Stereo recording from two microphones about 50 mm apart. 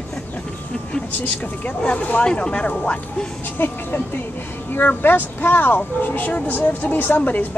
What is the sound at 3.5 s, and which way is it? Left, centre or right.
A woman's voice, left.